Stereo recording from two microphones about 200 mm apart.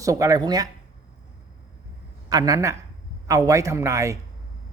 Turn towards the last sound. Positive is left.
turn(degrees=-15)  # may be behind; listen again after turning